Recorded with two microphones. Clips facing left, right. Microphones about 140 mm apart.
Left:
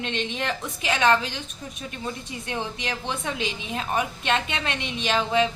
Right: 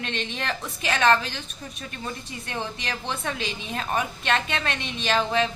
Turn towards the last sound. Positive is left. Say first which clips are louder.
# left 1 dB
turn(degrees=15)  # may be behind; listen again after turning